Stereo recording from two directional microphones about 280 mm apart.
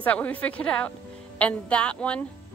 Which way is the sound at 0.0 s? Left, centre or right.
Centre.